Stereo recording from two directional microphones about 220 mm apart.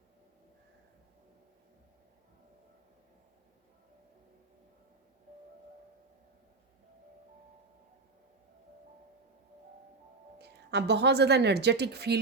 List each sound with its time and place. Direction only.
10.3 s a woman's voice: 50° right (ahead or behind)